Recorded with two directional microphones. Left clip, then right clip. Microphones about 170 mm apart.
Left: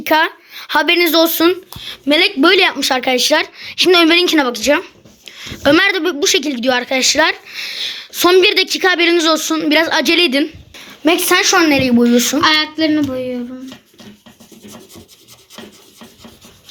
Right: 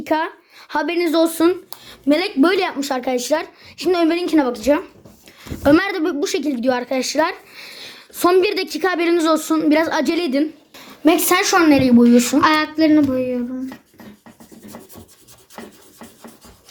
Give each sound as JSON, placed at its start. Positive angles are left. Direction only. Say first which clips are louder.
{"t": 0.0, "sound": "speech", "louder": "left 7 dB", "side_deg": 0}
{"t": 12.4, "sound": "speech", "louder": "left 2 dB", "side_deg": -30}